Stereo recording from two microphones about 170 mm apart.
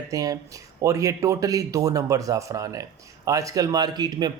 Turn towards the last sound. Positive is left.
turn(degrees=-25)  # may be behind; listen again after turning